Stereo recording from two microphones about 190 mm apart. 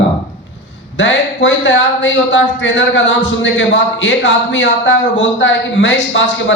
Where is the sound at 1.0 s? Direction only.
75° left (ahead or behind).